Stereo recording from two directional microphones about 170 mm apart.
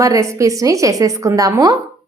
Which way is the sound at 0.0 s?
20° right (ahead or behind).